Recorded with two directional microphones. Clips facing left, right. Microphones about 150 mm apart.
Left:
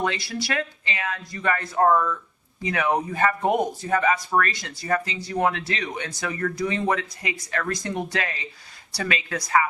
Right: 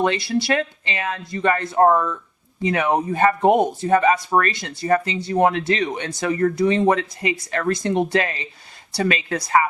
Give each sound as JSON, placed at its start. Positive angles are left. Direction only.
{"t": 0.0, "sound": "speech", "side_deg": -25}